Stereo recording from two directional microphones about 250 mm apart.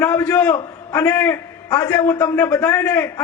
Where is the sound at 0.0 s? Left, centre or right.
Centre.